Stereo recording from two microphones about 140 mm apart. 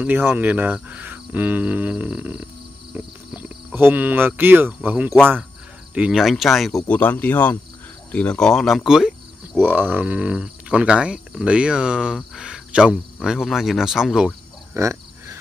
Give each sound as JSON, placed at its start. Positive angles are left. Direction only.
{"t": 0.0, "sound": "speech", "side_deg": -15}
{"t": 3.4, "sound": "speech", "side_deg": -15}
{"t": 14.7, "sound": "a sound", "side_deg": -20}